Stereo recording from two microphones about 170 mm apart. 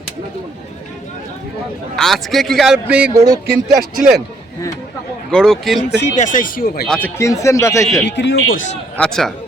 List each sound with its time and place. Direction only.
2.0 s a man's voice: centre (ahead or behind)
3.8 s speech: 60° right (ahead or behind)
5.3 s a man's voice: 5° left (ahead or behind)
6.1 s speech: 45° left (ahead or behind)
6.8 s a man's voice: 5° left (ahead or behind)
7.2 s speech: 15° left (ahead or behind)
8.0 s a man's voice: 90° left
9.0 s a man's voice: 5° left (ahead or behind)